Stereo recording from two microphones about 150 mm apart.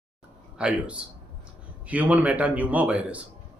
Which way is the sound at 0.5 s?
5° right (ahead or behind).